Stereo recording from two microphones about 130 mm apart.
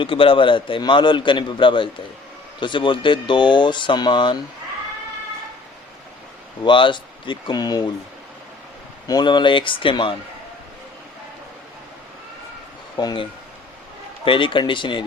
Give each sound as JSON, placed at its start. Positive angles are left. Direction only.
{"t": 0.0, "sound": "a man's voice", "side_deg": 45}
{"t": 6.7, "sound": "a man's voice", "side_deg": 40}
{"t": 9.0, "sound": "a man's voice", "side_deg": 35}
{"t": 13.0, "sound": "a man's voice", "side_deg": 30}
{"t": 14.3, "sound": "a man's voice", "side_deg": 40}